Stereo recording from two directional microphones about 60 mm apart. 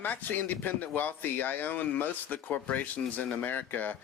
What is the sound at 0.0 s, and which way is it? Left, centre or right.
Speech, left.